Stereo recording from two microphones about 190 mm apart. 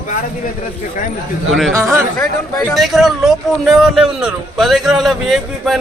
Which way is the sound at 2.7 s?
Centre (ahead or behind).